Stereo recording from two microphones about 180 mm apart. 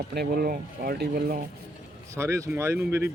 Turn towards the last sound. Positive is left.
turn(degrees=-15)  # may be behind; listen again after turning